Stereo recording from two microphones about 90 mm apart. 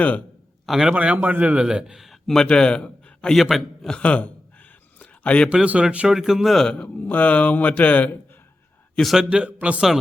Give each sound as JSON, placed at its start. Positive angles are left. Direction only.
{"t": 0.6, "sound": "a man's voice", "side_deg": -5}
{"t": 0.9, "sound": "a man's voice", "side_deg": -15}
{"t": 3.3, "sound": "a man's voice", "side_deg": 0}
{"t": 3.8, "sound": "a man's voice", "side_deg": 15}
{"t": 4.9, "sound": "a sound", "side_deg": 15}
{"t": 5.5, "sound": "a man's voice", "side_deg": -15}
{"t": 6.8, "sound": "a man's voice", "side_deg": 20}
{"t": 9.0, "sound": "a man's voice", "side_deg": 0}
{"t": 9.3, "sound": "a man's voice", "side_deg": -15}